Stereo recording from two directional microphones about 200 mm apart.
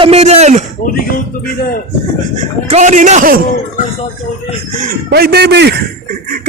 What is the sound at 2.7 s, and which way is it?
Speech, 35° right (ahead or behind).